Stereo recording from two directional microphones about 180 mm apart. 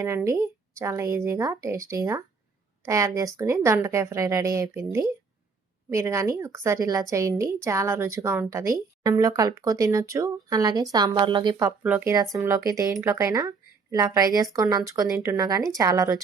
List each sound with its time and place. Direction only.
0.0 s a woman's voice: 15° right (ahead or behind)
11.8 s a woman's voice: 10° right (ahead or behind)